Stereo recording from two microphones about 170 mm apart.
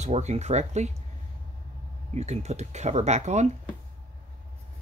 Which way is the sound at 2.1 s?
40° right (ahead or behind).